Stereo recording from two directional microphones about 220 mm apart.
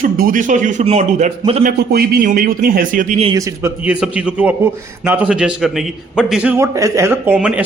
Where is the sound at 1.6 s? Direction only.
45° right (ahead or behind).